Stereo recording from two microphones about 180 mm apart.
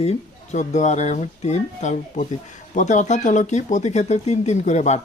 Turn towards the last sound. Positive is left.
turn(degrees=40)  # may be behind; listen again after turning